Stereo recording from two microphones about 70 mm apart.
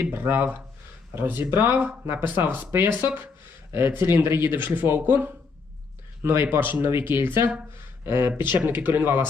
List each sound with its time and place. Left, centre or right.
0.0 s speech: right